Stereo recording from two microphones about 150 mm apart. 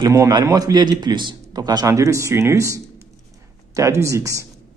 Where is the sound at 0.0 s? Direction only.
25° right (ahead or behind).